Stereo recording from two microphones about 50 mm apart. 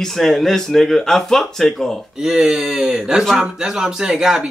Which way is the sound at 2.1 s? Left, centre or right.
Centre.